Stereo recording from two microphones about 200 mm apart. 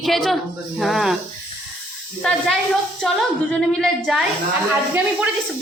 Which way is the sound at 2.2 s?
5° left (ahead or behind).